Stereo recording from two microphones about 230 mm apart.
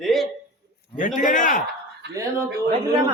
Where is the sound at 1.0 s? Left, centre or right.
Left.